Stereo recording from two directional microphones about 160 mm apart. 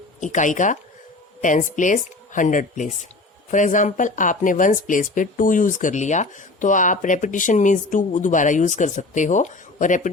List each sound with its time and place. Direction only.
0.2 s speech: 50° left (ahead or behind)